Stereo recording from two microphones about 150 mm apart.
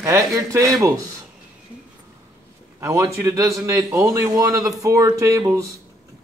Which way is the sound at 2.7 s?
20° right (ahead or behind).